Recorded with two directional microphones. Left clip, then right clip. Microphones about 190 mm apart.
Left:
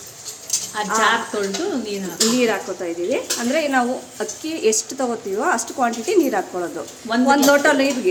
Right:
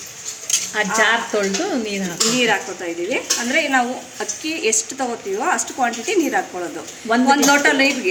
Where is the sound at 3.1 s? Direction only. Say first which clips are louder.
Right 3 dB; 45° left (ahead or behind).